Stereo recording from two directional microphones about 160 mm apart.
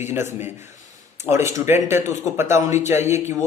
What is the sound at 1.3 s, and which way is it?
A man's voice, 20° right (ahead or behind).